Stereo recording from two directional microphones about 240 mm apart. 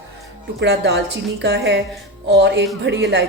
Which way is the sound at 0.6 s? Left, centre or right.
Right.